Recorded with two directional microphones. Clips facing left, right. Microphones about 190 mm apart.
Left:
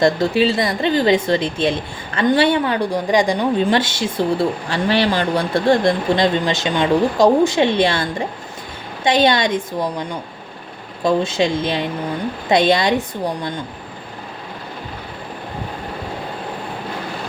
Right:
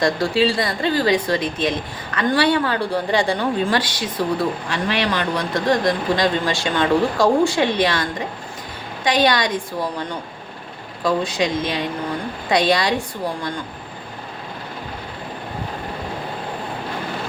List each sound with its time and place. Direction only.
0.0 s a woman's voice: 25° left (ahead or behind)
9.0 s a woman's voice: 25° left (ahead or behind)
11.0 s a woman's voice: 25° left (ahead or behind)